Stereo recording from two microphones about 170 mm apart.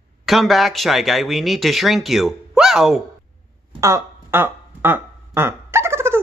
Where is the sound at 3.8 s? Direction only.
15° right (ahead or behind).